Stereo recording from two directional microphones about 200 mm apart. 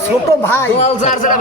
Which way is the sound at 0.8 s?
35° left (ahead or behind).